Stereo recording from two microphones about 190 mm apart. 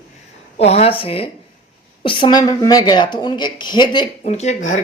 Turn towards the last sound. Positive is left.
turn(degrees=40)  # may be behind; listen again after turning